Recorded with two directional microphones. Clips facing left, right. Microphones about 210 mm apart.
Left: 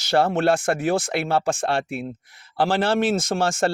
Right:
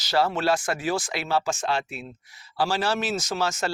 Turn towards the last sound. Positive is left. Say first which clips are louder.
# left 5 dB
turn(degrees=50)  # may be behind; listen again after turning